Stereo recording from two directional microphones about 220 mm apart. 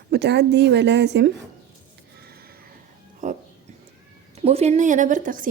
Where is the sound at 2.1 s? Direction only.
45° right (ahead or behind).